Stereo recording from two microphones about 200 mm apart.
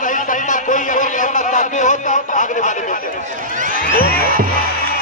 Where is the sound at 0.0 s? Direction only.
40° left (ahead or behind).